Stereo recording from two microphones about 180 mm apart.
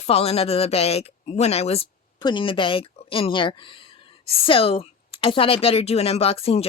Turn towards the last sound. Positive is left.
turn(degrees=35)  # may be behind; listen again after turning